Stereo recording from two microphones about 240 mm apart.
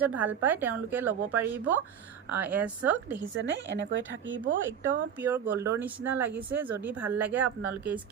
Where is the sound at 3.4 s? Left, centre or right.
Right.